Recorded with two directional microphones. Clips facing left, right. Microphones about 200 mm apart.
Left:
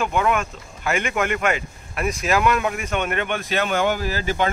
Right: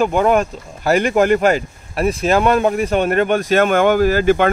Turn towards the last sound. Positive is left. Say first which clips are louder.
# right 10 dB
turn(degrees=-55)  # may be behind; listen again after turning